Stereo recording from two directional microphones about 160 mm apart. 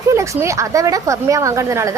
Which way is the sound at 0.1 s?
20° right (ahead or behind).